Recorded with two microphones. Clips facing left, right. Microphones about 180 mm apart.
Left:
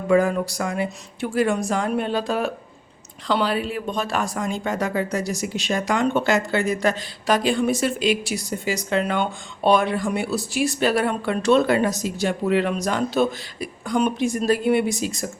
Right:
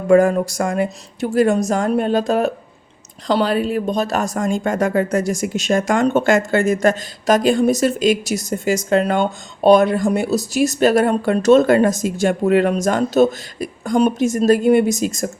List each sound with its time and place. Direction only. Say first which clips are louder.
0.1 s speech: right 6 dB; 50° right (ahead or behind)